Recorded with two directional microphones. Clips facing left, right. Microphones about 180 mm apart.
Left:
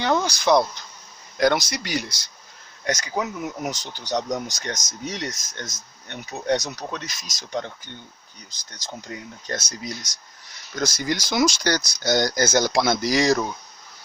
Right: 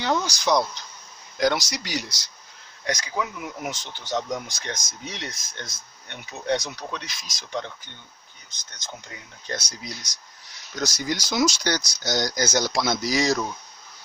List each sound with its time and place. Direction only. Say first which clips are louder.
0.0 s a sound: left 3 dB; 55° left (ahead or behind)
1.4 s speech: left 3 dB; 55° left (ahead or behind)
2.8 s speech: left 2 dB; 45° left (ahead or behind)
9.5 s speech: left 2 dB; 45° left (ahead or behind)
10.8 s speech: left 2 dB; 55° left (ahead or behind)